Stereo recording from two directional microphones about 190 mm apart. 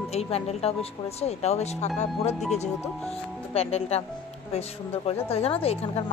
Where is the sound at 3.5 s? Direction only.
35° left (ahead or behind).